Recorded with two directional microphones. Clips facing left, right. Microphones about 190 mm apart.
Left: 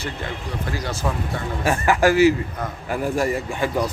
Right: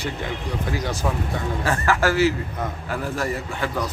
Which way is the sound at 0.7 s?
15° right (ahead or behind).